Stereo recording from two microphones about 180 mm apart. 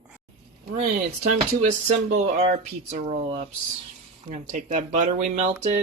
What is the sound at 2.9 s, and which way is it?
Speech, 40° right (ahead or behind).